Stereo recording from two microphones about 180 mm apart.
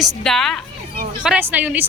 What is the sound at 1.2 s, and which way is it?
Speech, 10° right (ahead or behind).